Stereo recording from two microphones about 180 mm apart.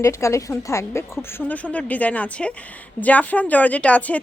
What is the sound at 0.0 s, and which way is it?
A woman's voice, 15° left (ahead or behind).